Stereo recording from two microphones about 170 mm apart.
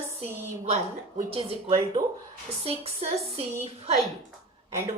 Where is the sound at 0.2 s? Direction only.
40° right (ahead or behind).